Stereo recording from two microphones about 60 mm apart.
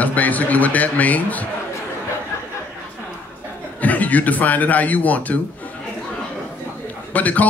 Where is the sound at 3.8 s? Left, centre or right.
Left.